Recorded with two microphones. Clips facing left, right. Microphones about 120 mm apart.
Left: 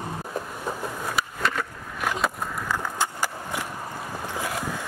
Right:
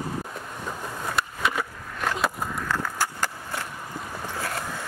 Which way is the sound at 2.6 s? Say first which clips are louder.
Left 1 dB; 15° left (ahead or behind).